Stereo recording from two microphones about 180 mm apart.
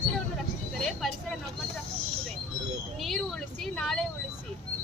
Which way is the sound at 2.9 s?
Centre (ahead or behind).